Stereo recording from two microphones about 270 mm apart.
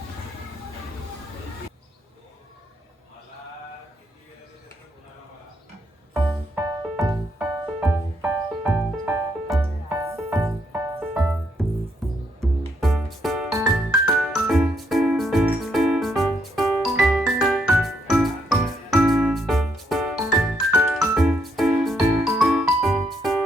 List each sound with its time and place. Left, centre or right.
6.1 s music: centre
11.6 s music: centre